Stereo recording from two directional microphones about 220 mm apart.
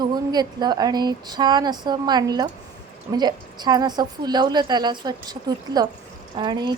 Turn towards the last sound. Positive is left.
turn(degrees=-20)  # may be behind; listen again after turning